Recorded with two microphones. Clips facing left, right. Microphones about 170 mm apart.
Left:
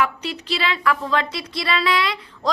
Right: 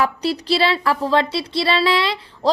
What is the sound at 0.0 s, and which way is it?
Speech, 35° right (ahead or behind).